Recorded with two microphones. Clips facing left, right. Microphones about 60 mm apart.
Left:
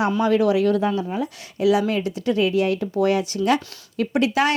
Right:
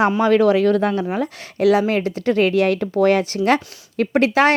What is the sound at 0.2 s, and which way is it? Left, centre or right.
Speech, right.